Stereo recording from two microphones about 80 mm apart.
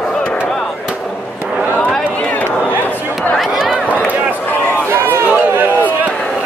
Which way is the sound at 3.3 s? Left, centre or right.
Centre.